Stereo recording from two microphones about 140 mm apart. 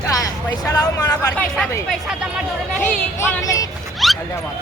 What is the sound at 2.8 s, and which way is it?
Speech, 15° left (ahead or behind).